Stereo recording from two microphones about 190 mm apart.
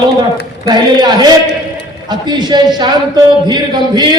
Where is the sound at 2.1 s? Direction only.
25° right (ahead or behind).